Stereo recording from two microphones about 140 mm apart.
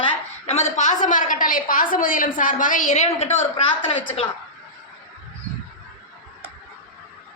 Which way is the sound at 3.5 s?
40° left (ahead or behind).